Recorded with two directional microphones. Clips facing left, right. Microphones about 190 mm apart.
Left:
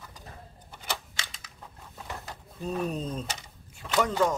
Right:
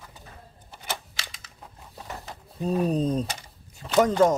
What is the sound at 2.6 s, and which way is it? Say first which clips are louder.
Speech: right 7 dB; 35° right (ahead or behind).